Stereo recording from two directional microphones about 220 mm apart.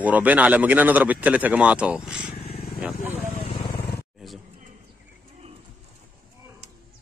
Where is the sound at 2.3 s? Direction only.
25° left (ahead or behind).